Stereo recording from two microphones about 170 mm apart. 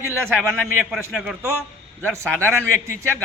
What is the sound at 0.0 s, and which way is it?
A man's voice, 10° right (ahead or behind).